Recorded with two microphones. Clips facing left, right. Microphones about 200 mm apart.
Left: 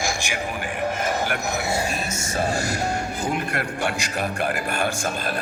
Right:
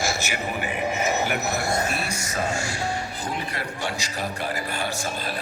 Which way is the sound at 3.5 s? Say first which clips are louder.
Left 4 dB; 50° left (ahead or behind).